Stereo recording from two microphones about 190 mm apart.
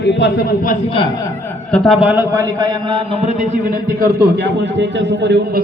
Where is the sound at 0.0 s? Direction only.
65° left (ahead or behind); by 0.8 s 50° left (ahead or behind).